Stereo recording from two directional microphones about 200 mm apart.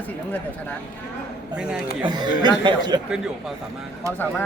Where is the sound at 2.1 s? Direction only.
20° right (ahead or behind).